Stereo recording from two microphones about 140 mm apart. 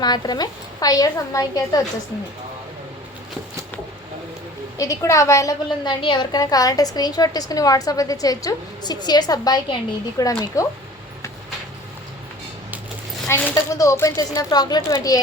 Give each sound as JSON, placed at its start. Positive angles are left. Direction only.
{"t": 0.0, "sound": "a woman's voice", "side_deg": 30}
{"t": 4.8, "sound": "a woman's voice", "side_deg": 20}
{"t": 13.2, "sound": "a woman's voice", "side_deg": 20}